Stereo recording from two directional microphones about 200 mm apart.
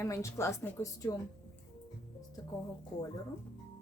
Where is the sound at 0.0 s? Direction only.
15° left (ahead or behind).